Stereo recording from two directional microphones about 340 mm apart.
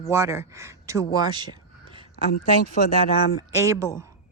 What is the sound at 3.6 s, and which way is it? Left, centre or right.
Speech, centre.